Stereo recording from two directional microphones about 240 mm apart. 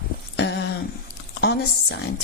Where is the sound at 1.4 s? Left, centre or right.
Left.